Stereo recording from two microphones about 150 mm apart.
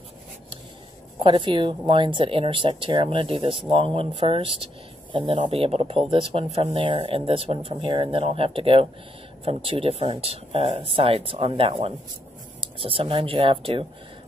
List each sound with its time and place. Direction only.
1.2 s speech: 30° right (ahead or behind)